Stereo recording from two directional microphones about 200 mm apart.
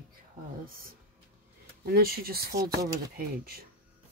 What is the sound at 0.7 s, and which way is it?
Speech, 45° right (ahead or behind).